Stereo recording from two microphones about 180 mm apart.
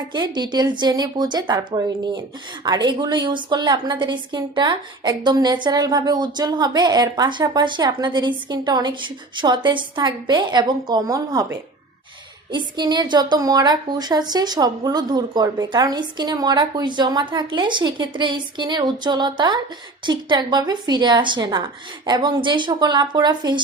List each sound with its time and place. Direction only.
0.1 s a woman's voice: 25° right (ahead or behind)